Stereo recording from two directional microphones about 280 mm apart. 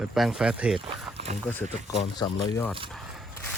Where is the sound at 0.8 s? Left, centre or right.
Right.